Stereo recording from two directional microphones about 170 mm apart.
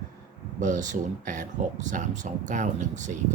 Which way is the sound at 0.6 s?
45° right (ahead or behind).